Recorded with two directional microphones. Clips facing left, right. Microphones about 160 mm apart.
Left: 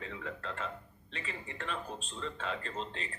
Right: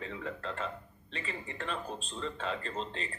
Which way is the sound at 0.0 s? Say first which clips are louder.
Right 3 dB; 35° right (ahead or behind).